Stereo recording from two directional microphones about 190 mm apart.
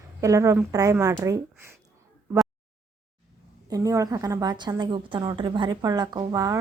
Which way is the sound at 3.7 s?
15° right (ahead or behind).